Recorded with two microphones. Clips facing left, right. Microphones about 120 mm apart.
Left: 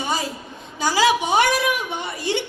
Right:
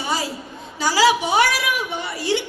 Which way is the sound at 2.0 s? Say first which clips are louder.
Right 3 dB; 20° left (ahead or behind).